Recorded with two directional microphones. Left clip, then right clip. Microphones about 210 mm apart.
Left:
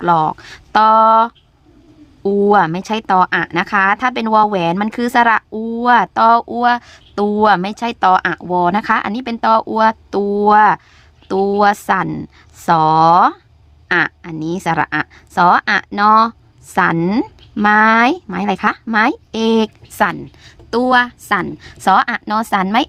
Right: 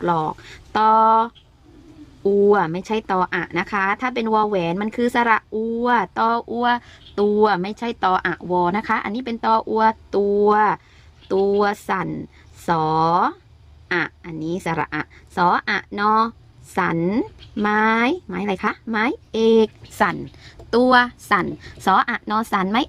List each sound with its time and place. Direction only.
0.0 s speech: 30° left (ahead or behind)